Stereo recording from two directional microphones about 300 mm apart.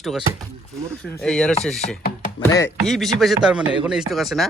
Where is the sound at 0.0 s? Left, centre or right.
Centre.